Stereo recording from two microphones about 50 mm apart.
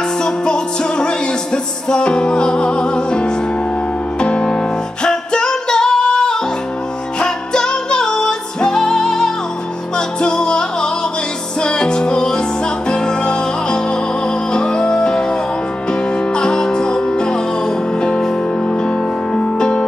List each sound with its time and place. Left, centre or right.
0.2 s music: centre